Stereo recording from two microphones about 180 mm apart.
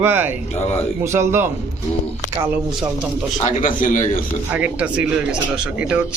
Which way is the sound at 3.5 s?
45° left (ahead or behind).